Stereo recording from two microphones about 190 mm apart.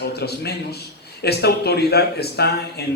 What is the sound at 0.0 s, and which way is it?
A man's voice, 60° left (ahead or behind).